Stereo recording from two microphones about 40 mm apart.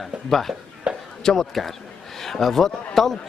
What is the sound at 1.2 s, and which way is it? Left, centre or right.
A man's voice, centre.